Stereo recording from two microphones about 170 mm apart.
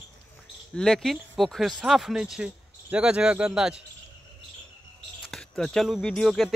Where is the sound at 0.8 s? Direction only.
5° left (ahead or behind).